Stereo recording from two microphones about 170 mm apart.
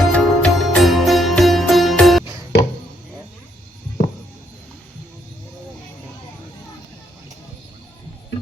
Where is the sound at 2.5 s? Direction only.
90° left.